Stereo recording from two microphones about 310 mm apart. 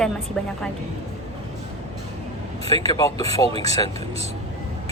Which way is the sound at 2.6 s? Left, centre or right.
Centre.